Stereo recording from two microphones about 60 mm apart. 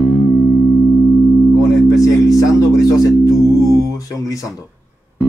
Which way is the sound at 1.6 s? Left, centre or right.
Left.